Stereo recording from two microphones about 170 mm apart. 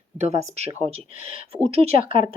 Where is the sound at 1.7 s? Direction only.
35° right (ahead or behind).